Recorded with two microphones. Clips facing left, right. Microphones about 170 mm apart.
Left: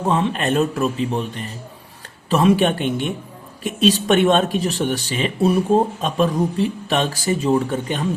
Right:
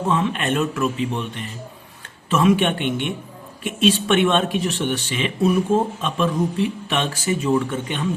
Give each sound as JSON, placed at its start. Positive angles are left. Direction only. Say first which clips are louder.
{"t": 0.1, "sound": "speech", "louder": "left 2 dB", "side_deg": 35}